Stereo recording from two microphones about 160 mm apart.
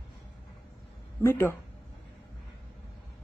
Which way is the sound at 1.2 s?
15° left (ahead or behind).